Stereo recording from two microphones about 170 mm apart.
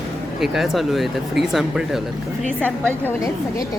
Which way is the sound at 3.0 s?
20° left (ahead or behind).